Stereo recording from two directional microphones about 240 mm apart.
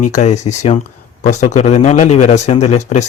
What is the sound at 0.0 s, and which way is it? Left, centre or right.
Speech, left.